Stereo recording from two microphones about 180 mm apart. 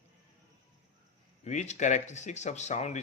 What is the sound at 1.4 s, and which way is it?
Speech, 40° left (ahead or behind).